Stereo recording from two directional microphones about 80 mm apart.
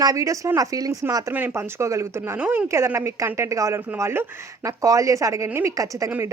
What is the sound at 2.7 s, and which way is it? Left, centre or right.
Speech, right.